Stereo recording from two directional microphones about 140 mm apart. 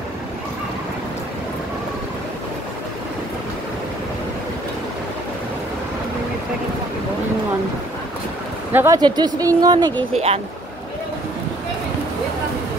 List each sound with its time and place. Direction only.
8.7 s speech: 20° right (ahead or behind)
9.0 s speech: 30° right (ahead or behind)
10.1 s speech: 50° right (ahead or behind)